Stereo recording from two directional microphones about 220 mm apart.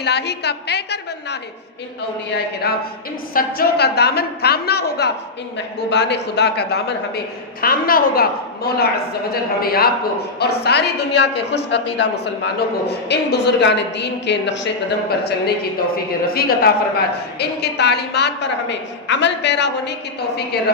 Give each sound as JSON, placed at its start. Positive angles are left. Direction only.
{"t": 0.0, "sound": "a woman's voice", "side_deg": 50}
{"t": 2.7, "sound": "a woman's voice", "side_deg": 45}
{"t": 16.2, "sound": "a woman's voice", "side_deg": 45}